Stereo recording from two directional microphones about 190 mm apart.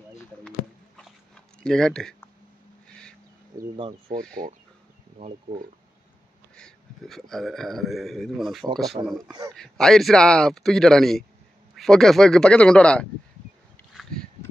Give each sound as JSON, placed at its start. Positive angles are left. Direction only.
{"t": 0.9, "sound": "a sound", "side_deg": 5}
{"t": 4.1, "sound": "speech", "side_deg": -50}
{"t": 6.5, "sound": "a man's voice", "side_deg": 5}
{"t": 9.0, "sound": "speech", "side_deg": -25}
{"t": 9.6, "sound": "a man's voice", "side_deg": 0}